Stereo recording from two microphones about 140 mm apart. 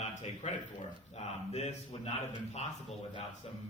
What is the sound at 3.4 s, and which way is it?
Speech, 45° left (ahead or behind).